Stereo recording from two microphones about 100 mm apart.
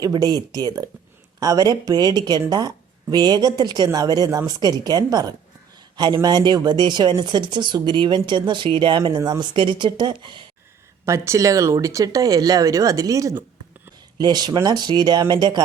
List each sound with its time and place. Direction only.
0.0 s speech: 40° right (ahead or behind)
11.0 s speech: 30° right (ahead or behind)
14.2 s speech: 45° right (ahead or behind)